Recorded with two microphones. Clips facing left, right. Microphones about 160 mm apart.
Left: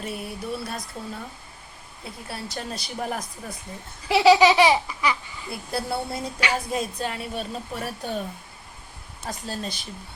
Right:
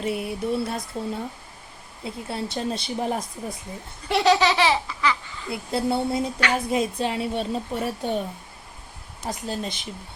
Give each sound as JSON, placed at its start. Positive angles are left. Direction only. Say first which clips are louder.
{"t": 0.0, "sound": "a woman's voice", "louder": "right 6 dB", "side_deg": -20}
{"t": 4.1, "sound": "laughter", "louder": "left 3 dB", "side_deg": 10}
{"t": 5.5, "sound": "a woman's voice", "louder": "right 4 dB", "side_deg": -20}
{"t": 9.2, "sound": "a woman's voice", "louder": "right 3 dB", "side_deg": -20}